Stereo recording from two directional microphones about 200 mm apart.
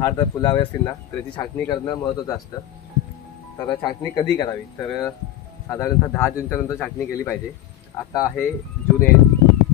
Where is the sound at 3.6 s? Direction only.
25° left (ahead or behind).